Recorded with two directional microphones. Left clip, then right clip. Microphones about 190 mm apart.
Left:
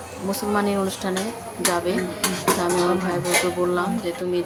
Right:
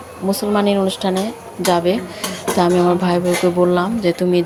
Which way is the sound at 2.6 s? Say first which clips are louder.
Right 6 dB; 25° right (ahead or behind).